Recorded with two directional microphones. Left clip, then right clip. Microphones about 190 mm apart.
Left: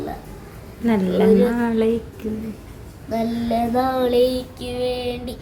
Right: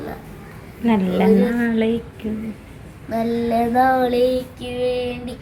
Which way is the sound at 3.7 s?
35° left (ahead or behind).